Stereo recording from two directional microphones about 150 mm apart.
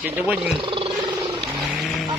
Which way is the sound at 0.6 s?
35° right (ahead or behind).